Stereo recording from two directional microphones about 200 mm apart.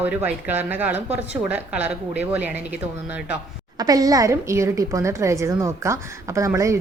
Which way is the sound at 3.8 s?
20° right (ahead or behind).